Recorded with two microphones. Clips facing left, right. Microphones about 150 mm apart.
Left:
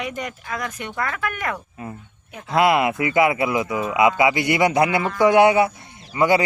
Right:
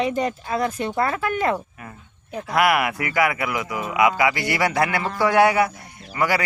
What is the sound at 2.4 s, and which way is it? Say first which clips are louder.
A man's voice: left 2 dB; 25° left (ahead or behind).